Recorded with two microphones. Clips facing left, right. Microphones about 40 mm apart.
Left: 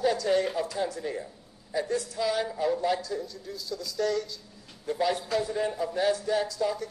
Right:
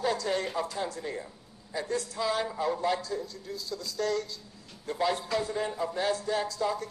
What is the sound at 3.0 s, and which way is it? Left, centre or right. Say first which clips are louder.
Speech: left 1 dB; right.